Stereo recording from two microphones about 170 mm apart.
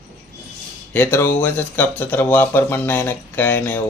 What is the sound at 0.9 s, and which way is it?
Speech, 15° left (ahead or behind).